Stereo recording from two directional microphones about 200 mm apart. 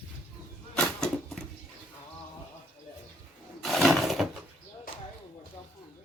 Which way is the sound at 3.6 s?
Centre (ahead or behind).